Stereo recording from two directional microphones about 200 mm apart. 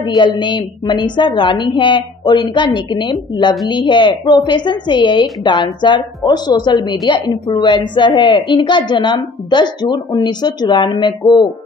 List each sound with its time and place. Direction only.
0.0 s a woman's voice: 20° left (ahead or behind)